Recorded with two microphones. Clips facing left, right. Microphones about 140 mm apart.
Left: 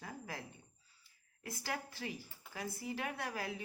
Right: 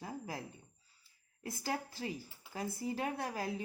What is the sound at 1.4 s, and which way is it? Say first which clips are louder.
A woman's voice: right 4 dB; 30° right (ahead or behind).